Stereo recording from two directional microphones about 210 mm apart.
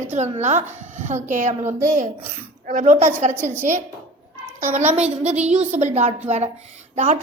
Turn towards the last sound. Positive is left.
turn(degrees=-35)  # may be behind; listen again after turning